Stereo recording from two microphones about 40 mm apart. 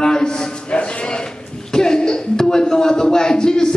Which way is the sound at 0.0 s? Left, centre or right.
Centre.